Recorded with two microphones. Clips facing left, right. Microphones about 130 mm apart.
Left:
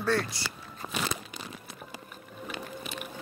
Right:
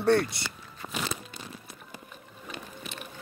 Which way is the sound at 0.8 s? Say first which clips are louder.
Left 1 dB; 70° left (ahead or behind).